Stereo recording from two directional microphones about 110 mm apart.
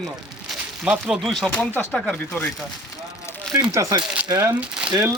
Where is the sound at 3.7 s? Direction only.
30° right (ahead or behind).